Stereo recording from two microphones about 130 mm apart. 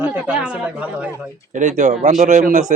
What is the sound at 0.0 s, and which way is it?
Speech, 10° right (ahead or behind).